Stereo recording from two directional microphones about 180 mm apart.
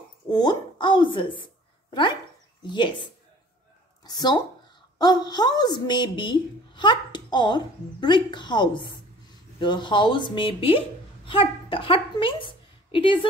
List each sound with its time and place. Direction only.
0.3 s a woman's voice: 25° left (ahead or behind)